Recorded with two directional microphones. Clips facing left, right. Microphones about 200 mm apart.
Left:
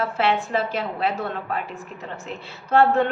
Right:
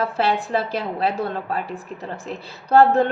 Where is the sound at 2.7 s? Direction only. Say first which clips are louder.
Right 3 dB; 35° right (ahead or behind).